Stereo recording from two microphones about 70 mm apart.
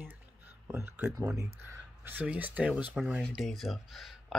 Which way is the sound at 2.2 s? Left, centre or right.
Right.